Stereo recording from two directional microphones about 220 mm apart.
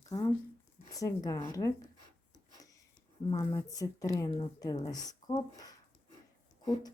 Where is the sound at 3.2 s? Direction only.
15° left (ahead or behind).